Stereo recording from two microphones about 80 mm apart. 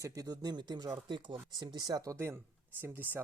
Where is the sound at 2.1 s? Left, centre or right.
Right.